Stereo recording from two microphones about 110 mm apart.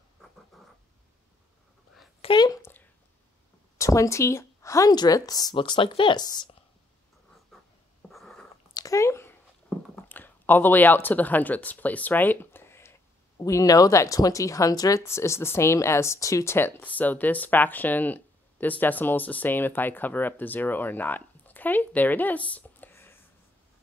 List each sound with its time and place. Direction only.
0.5 s cat: centre (ahead or behind)
2.2 s speech: 60° left (ahead or behind)
3.7 s a woman's voice: 30° left (ahead or behind)
5.6 s speech: 50° left (ahead or behind)
8.1 s a sound: centre (ahead or behind)
8.7 s a sound: 30° left (ahead or behind)
9.9 s speech: 15° left (ahead or behind)